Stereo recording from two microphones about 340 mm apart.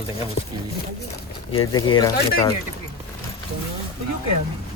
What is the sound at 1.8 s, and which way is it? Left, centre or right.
Speech, centre.